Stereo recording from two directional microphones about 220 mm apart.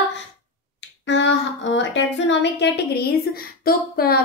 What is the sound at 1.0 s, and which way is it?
A woman's voice, 55° left (ahead or behind).